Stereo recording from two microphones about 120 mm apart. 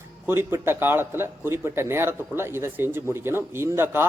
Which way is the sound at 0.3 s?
20° right (ahead or behind).